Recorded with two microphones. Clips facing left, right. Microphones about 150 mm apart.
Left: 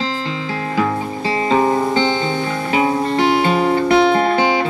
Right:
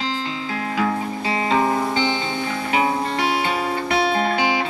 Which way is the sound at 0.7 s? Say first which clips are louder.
Left 3 dB; 35° left (ahead or behind).